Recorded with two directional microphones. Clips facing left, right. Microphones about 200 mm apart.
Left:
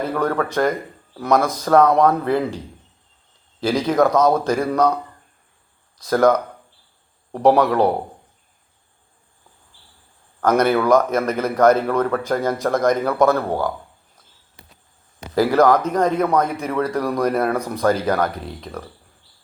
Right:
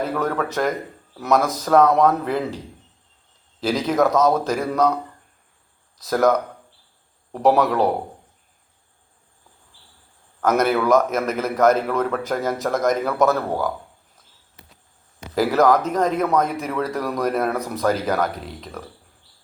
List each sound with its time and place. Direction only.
0.2 s speech: 5° right (ahead or behind)
3.6 s speech: 5° right (ahead or behind)
6.0 s speech: 5° right (ahead or behind)
7.4 s speech: 5° right (ahead or behind)
10.4 s speech: 5° right (ahead or behind)
14.6 s insect: 30° left (ahead or behind)
15.4 s speech: 5° right (ahead or behind)